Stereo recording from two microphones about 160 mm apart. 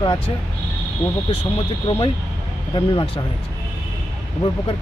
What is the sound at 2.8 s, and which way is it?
Speech, 30° left (ahead or behind).